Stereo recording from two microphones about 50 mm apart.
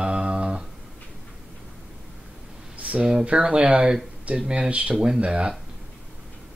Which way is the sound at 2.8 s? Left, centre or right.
Right.